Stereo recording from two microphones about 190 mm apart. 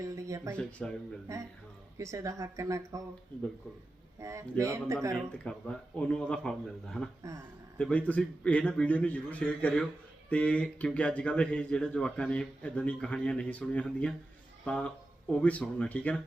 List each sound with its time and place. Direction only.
0.0 s a sound: 15° right (ahead or behind)
0.5 s speech: 5° left (ahead or behind)
1.3 s speech: 15° right (ahead or behind)
4.2 s speech: 15° right (ahead or behind)
5.1 s speech: 5° left (ahead or behind)